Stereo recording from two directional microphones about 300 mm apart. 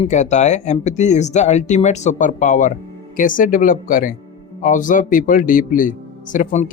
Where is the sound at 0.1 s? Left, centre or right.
Left.